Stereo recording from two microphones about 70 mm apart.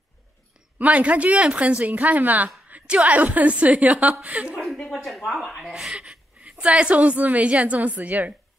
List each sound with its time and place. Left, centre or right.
0.7 s a woman's voice: right
4.6 s a sound: centre
4.9 s speech: centre
5.3 s chuckle: centre
6.5 s a woman's voice: centre